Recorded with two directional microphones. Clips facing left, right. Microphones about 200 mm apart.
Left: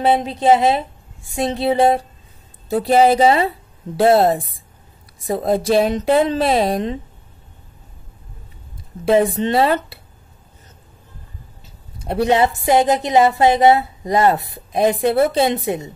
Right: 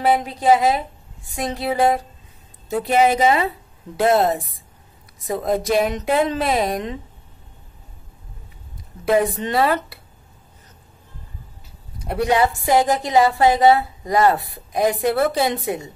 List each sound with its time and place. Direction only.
0.0 s a woman's voice: 25° left (ahead or behind)
9.0 s a woman's voice: 25° left (ahead or behind)
12.0 s a woman's voice: 25° left (ahead or behind)